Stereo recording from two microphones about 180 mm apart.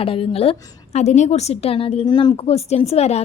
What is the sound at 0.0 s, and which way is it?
A woman's voice, 30° left (ahead or behind).